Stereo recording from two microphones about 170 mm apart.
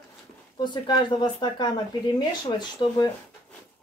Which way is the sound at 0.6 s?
25° left (ahead or behind).